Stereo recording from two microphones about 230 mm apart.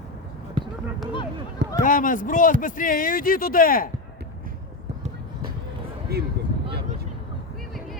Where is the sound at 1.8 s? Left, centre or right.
Left.